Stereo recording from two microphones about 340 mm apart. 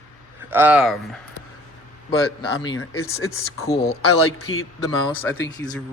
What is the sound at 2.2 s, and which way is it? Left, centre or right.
Speech, left.